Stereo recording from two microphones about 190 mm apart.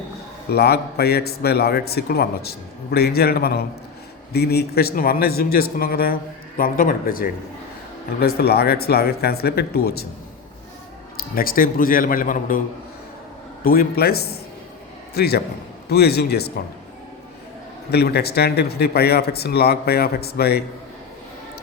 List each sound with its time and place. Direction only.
0.5 s a man's voice: 55° left (ahead or behind)
11.2 s a man's voice: 50° left (ahead or behind)
13.7 s a man's voice: 55° left (ahead or behind)
17.9 s a man's voice: 55° left (ahead or behind)